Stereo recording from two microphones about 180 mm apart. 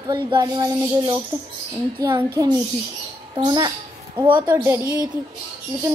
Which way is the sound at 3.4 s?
25° right (ahead or behind).